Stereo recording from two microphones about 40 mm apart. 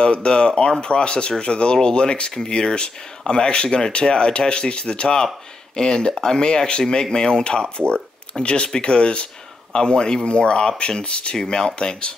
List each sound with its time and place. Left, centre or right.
0.0 s speech: left
11.3 s speech: centre